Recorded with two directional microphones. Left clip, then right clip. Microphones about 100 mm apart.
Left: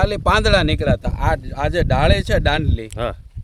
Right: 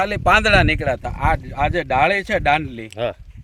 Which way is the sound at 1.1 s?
90° left.